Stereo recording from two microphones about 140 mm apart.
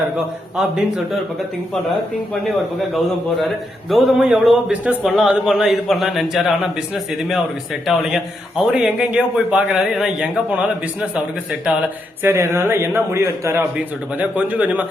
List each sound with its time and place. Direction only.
0.5 s a man's voice: 5° right (ahead or behind)
2.9 s a man's voice: centre (ahead or behind)
12.2 s a man's voice: 20° right (ahead or behind)